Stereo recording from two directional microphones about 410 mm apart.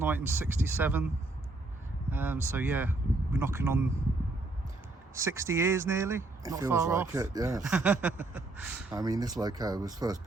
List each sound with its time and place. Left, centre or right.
0.0 s speech: centre
2.0 s speech: centre
5.1 s speech: centre